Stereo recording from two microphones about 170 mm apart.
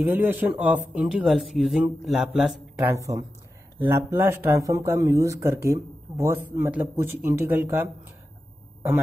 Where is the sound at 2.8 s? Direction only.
15° right (ahead or behind).